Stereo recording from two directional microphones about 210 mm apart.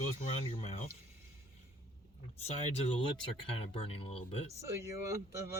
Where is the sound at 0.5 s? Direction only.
30° left (ahead or behind).